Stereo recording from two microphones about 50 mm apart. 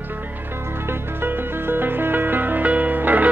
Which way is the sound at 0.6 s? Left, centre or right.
Right.